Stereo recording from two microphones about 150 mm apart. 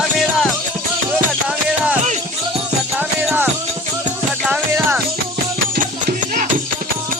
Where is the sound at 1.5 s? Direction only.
10° right (ahead or behind).